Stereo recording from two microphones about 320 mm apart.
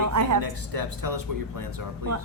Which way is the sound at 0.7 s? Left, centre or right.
Right.